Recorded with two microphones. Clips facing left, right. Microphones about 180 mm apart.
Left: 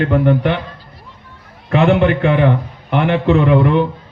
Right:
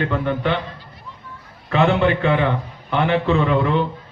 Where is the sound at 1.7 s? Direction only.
20° left (ahead or behind).